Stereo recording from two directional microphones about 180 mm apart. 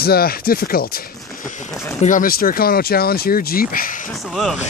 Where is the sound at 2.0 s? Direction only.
50° left (ahead or behind).